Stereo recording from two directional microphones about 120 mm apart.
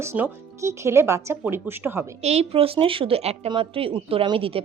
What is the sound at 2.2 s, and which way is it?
Speech, 60° right (ahead or behind).